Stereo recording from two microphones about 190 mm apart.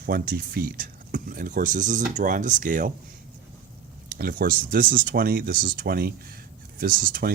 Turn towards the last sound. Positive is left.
turn(degrees=-50)  # may be behind; listen again after turning